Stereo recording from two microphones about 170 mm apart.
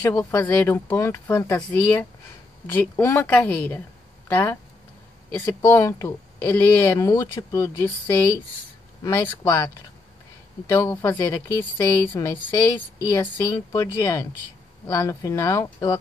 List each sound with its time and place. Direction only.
0.0 s speech: 10° left (ahead or behind)
9.0 s speech: 15° left (ahead or behind)
10.7 s speech: 15° left (ahead or behind)